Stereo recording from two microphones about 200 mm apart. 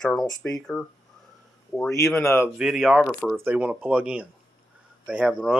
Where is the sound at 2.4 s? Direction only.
5° right (ahead or behind).